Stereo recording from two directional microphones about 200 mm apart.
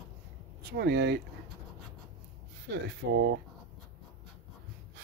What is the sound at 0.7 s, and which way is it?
Speech, 55° right (ahead or behind).